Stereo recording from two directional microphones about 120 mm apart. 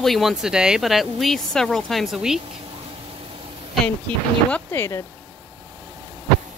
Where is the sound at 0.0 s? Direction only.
Centre (ahead or behind).